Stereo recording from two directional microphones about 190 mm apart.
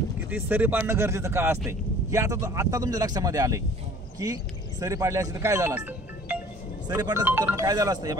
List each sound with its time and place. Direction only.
0.3 s speech: 10° right (ahead or behind)
5.8 s music: 10° right (ahead or behind)
6.9 s speech: 15° right (ahead or behind)